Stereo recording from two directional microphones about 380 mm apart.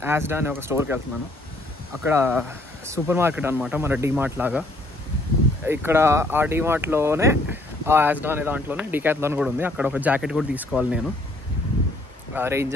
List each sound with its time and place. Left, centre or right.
0.0 s speech: centre
2.0 s speech: centre
5.7 s speech: centre
12.4 s speech: centre